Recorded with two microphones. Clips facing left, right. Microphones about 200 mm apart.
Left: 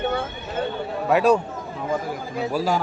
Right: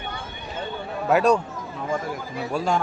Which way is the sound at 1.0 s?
Centre (ahead or behind).